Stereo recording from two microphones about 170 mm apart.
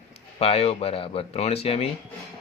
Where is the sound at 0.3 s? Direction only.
35° left (ahead or behind).